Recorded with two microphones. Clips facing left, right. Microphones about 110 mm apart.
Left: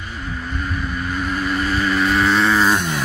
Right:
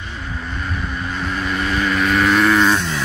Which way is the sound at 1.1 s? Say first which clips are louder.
Left 1 dB; 5° left (ahead or behind).